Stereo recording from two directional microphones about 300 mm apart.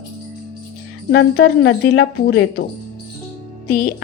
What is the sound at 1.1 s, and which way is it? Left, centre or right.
A woman's voice, left.